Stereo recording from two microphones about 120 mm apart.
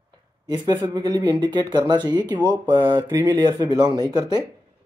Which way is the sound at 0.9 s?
35° right (ahead or behind).